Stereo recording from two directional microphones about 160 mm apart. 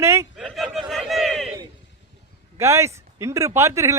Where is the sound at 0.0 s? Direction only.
15° right (ahead or behind).